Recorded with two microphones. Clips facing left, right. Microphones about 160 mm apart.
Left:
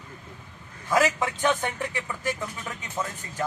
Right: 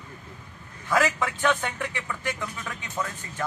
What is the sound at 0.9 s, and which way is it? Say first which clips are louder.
Speech: left 1 dB; 15° left (ahead or behind).